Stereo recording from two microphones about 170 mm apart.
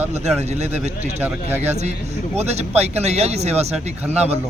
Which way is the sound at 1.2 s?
10° right (ahead or behind).